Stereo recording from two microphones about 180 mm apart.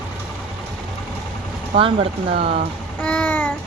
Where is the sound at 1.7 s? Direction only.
30° right (ahead or behind).